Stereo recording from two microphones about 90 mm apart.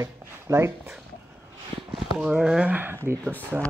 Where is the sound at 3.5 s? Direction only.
10° right (ahead or behind).